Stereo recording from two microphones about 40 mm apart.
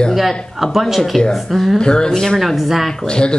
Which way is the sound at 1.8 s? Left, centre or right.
Left.